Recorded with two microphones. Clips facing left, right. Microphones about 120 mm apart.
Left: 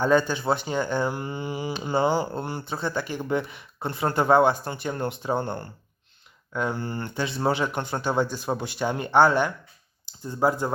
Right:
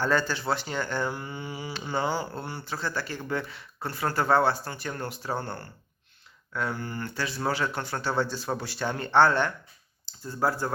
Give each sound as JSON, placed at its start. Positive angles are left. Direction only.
{"t": 0.0, "sound": "speech", "side_deg": 15}